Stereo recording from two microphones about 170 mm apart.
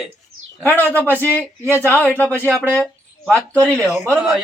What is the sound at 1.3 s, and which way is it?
Speech, 15° right (ahead or behind).